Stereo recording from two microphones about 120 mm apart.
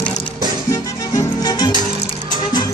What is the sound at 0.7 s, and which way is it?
Music, 30° left (ahead or behind).